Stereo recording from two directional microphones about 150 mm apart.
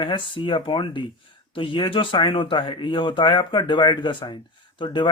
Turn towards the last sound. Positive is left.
turn(degrees=35)  # may be behind; listen again after turning